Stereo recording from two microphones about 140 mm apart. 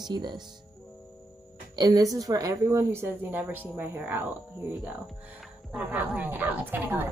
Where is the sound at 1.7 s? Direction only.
30° right (ahead or behind).